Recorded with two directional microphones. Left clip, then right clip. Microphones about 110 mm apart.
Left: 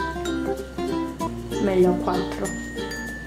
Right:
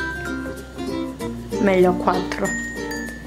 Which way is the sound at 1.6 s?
40° right (ahead or behind).